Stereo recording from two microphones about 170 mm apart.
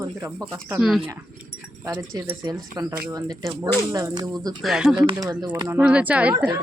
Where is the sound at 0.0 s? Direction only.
15° right (ahead or behind).